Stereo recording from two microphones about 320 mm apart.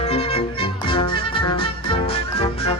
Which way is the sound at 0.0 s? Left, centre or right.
Centre.